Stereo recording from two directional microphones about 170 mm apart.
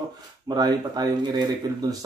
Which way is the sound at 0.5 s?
25° right (ahead or behind).